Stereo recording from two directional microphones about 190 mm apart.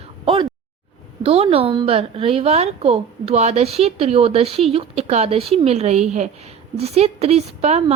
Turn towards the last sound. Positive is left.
turn(degrees=-35)  # may be behind; listen again after turning